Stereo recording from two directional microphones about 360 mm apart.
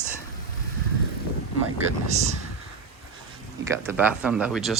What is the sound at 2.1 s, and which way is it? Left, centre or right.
Speech, centre.